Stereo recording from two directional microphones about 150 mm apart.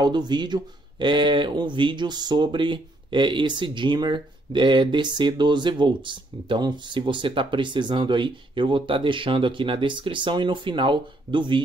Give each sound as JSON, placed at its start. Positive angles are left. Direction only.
{"t": 0.0, "sound": "speech", "side_deg": -30}